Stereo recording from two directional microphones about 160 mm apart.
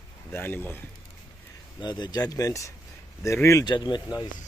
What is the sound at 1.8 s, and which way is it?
Speech, 25° left (ahead or behind).